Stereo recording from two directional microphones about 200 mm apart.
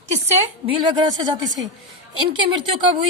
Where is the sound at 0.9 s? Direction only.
20° right (ahead or behind).